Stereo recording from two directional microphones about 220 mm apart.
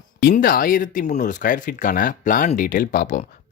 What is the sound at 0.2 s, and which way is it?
Speech, 40° left (ahead or behind).